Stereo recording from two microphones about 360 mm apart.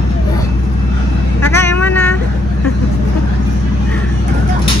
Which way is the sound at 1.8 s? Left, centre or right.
Centre.